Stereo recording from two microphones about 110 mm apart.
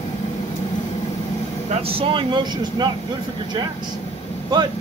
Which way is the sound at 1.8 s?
60° right (ahead or behind).